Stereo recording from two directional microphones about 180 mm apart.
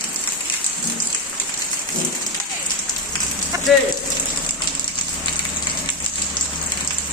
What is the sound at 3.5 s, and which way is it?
Rain on surface, 15° right (ahead or behind).